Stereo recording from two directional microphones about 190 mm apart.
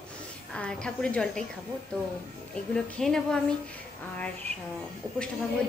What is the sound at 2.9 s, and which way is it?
Speech, centre (ahead or behind).